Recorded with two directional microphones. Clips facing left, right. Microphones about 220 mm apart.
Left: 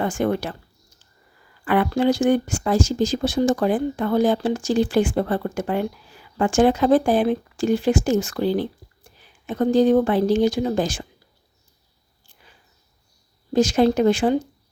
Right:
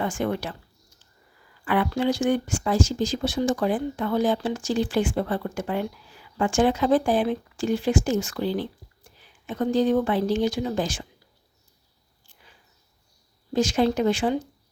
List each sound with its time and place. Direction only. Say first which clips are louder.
0.0 s speech: left 4 dB; 45° left (ahead or behind)
1.6 s speech: left 4 dB; 45° left (ahead or behind)
13.5 s speech: left 4 dB; 40° left (ahead or behind)